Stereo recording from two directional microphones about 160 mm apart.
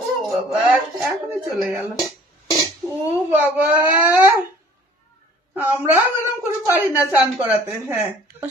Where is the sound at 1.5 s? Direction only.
5° right (ahead or behind).